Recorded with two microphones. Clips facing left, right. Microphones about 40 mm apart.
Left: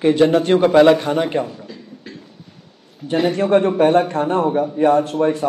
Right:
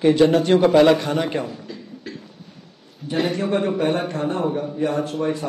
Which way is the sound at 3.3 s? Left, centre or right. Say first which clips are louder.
Left 6 dB; left.